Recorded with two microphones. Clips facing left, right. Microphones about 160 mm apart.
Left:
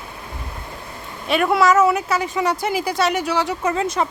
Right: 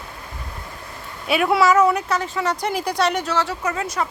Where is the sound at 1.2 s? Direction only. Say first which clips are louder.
Left 1 dB; 5° right (ahead or behind); by 3.5 s 15° left (ahead or behind).